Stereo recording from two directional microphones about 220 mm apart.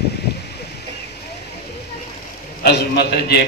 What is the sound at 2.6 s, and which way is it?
Speech, 45° left (ahead or behind).